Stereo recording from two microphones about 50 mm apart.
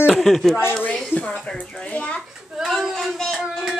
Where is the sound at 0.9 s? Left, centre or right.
Left.